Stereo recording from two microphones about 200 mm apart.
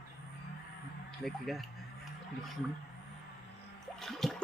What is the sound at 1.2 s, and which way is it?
Speech, centre (ahead or behind).